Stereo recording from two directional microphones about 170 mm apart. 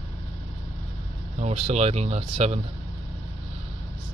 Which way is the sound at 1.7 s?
40° right (ahead or behind).